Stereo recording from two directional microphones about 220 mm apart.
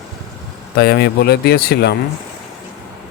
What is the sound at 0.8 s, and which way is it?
Speech, 45° left (ahead or behind).